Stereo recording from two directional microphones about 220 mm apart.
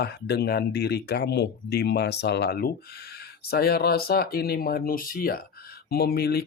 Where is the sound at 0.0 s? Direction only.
50° left (ahead or behind).